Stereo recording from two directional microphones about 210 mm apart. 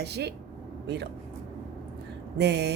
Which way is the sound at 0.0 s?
50° right (ahead or behind).